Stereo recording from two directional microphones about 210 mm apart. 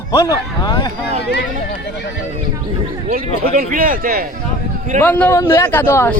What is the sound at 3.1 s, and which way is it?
Speech, 45° right (ahead or behind).